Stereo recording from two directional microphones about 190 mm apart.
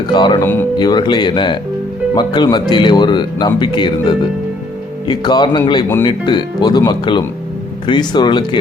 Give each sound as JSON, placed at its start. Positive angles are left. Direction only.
{"t": 0.1, "sound": "speech", "side_deg": 25}
{"t": 0.4, "sound": "speech", "side_deg": 10}
{"t": 0.8, "sound": "speech", "side_deg": 20}
{"t": 5.0, "sound": "speech", "side_deg": 20}